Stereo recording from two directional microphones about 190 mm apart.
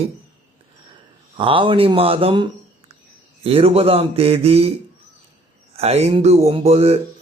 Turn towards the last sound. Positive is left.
turn(degrees=-30)  # may be behind; listen again after turning